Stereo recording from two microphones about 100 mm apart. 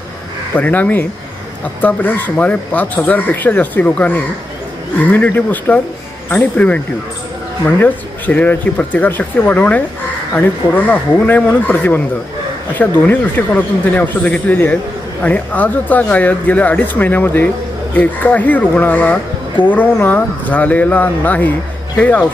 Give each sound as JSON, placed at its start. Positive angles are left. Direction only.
{"t": 0.6, "sound": "speech", "side_deg": 15}
{"t": 7.8, "sound": "speech", "side_deg": 20}